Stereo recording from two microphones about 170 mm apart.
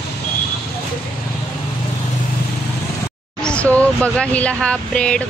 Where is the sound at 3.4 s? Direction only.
5° left (ahead or behind).